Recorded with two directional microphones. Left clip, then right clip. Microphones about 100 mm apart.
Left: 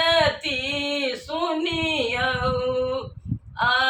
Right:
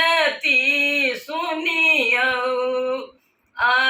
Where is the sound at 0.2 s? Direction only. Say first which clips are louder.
Right 4 dB; 15° left (ahead or behind).